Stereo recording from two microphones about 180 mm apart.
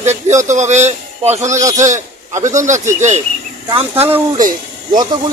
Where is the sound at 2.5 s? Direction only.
45° right (ahead or behind).